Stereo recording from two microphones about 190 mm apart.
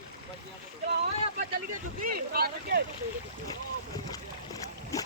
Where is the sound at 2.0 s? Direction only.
50° right (ahead or behind).